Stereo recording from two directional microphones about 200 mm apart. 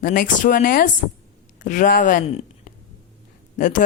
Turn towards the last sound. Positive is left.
turn(degrees=40)  # may be behind; listen again after turning